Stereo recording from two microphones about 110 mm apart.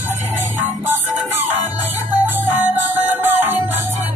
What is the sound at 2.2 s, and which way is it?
Music, 15° right (ahead or behind).